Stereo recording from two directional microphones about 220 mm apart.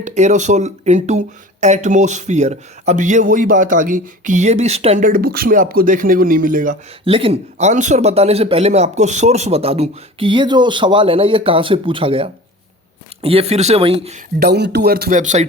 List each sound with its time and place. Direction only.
0.0 s speech: 30° right (ahead or behind)
7.0 s a man's voice: 25° right (ahead or behind)
14.3 s speech: 45° right (ahead or behind)